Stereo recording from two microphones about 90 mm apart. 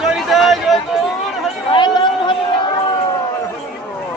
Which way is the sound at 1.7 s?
60° left (ahead or behind).